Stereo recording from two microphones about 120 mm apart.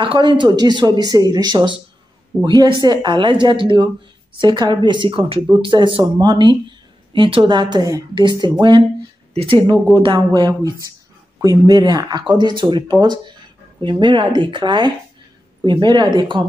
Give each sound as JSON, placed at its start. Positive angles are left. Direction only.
{"t": 0.0, "sound": "speech", "side_deg": -45}
{"t": 9.3, "sound": "speech", "side_deg": -55}
{"t": 9.9, "sound": "speech", "side_deg": -35}